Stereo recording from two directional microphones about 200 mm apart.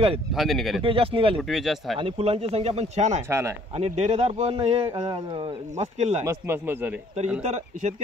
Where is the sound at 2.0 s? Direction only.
30° right (ahead or behind).